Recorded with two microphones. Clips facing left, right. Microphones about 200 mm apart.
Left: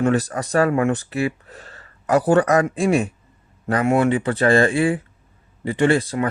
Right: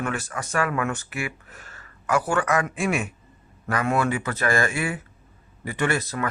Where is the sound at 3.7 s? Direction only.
25° left (ahead or behind).